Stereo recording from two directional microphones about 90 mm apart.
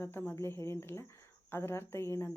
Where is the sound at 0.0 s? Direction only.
25° left (ahead or behind).